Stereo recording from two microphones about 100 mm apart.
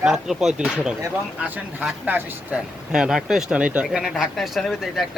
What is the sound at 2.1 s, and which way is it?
Speech, 15° right (ahead or behind).